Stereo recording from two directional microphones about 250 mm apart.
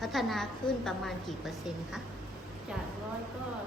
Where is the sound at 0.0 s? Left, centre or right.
Centre.